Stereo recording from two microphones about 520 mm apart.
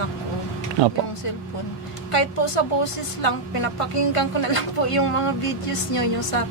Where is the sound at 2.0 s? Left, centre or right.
Left.